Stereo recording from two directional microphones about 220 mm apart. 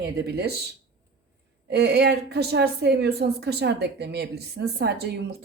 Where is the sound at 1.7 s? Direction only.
50° right (ahead or behind).